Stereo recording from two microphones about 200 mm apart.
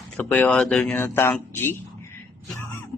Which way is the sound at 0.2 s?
5° left (ahead or behind).